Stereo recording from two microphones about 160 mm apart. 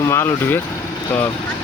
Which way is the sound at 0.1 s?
15° left (ahead or behind).